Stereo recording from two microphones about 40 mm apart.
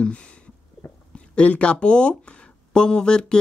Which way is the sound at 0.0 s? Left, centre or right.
Left.